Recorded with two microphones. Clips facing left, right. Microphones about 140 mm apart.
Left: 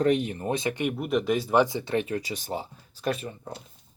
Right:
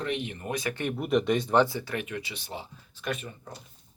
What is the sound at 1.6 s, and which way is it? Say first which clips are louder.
Speech: left 6 dB; 20° left (ahead or behind).